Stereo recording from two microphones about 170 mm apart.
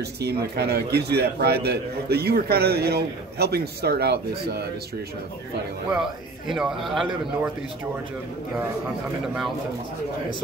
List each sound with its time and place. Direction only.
0.0 s a man's voice: 70° right (ahead or behind)
6.4 s a man's voice: 5° right (ahead or behind)